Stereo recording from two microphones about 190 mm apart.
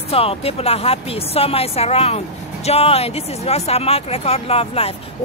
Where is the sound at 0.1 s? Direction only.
30° left (ahead or behind).